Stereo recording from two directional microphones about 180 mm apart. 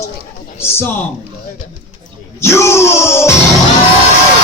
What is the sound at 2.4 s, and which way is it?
Speech, 15° left (ahead or behind).